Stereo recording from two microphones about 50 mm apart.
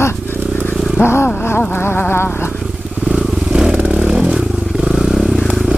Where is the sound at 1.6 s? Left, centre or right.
Left.